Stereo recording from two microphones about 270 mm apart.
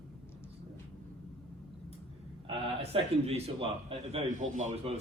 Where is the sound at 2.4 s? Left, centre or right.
Centre.